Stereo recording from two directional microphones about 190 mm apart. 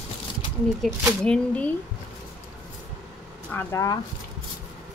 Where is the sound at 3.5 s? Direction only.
15° left (ahead or behind).